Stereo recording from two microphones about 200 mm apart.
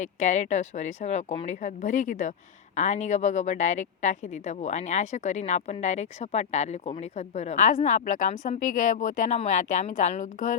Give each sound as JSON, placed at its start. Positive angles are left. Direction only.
{"t": 0.0, "sound": "a woman's voice", "side_deg": 40}